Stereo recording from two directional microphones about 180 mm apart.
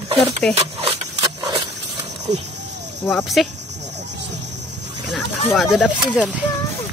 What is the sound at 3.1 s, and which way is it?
Speech, 5° left (ahead or behind).